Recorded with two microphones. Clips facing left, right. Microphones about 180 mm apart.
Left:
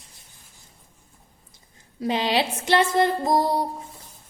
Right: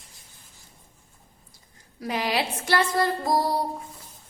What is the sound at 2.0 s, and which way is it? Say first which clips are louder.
A woman's voice: left 4 dB; 25° left (ahead or behind).